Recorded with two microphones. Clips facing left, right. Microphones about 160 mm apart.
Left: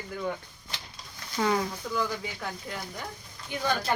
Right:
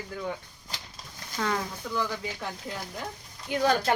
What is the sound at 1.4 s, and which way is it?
Speech, 10° left (ahead or behind).